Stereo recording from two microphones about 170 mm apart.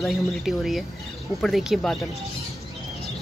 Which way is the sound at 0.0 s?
Centre (ahead or behind).